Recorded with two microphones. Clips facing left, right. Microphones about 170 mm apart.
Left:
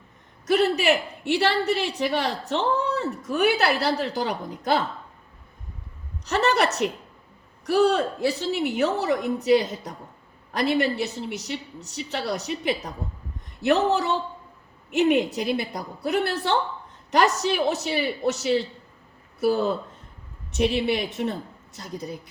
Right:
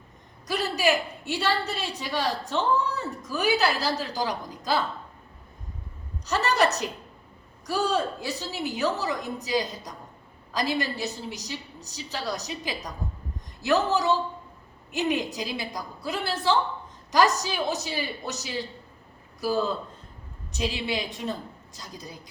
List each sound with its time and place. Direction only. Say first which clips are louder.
0.4 s a woman's voice: left 5 dB; 60° left (ahead or behind)
6.2 s a woman's voice: left 2 dB; 60° left (ahead or behind)